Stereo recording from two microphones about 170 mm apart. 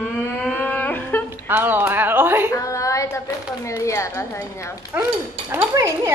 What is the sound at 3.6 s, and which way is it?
A woman's voice, 15° left (ahead or behind).